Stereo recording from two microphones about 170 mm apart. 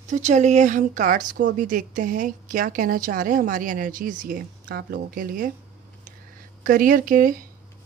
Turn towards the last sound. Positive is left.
turn(degrees=-55)  # may be behind; listen again after turning